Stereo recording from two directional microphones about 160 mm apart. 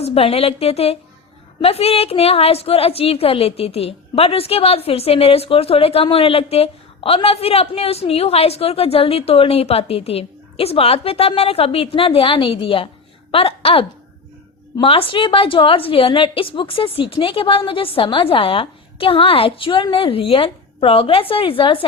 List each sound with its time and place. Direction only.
0.0 s a woman's voice: 35° left (ahead or behind)